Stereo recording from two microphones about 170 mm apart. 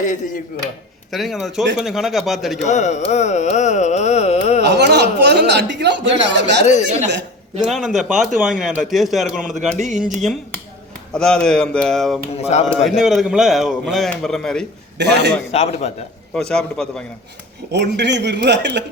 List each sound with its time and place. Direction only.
0.0 s carnatic music: 50° left (ahead or behind)
1.1 s a man's voice: centre (ahead or behind)
2.6 s carnatic music: 45° left (ahead or behind)
4.6 s speech: 80° right
7.6 s a man's voice: centre (ahead or behind)
9.6 s speech: 45° right (ahead or behind)
11.1 s a man's voice: 5° left (ahead or behind)
12.4 s a man's voice: 40° left (ahead or behind)
12.7 s a man's voice: centre (ahead or behind)
14.9 s a man's voice: 85° right
15.5 s a man's voice: 40° left (ahead or behind)
16.3 s a man's voice: 5° left (ahead or behind)
17.7 s speech: 85° right